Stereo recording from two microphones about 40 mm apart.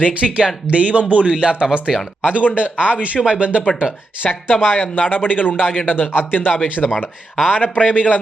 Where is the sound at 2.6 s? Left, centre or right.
Right.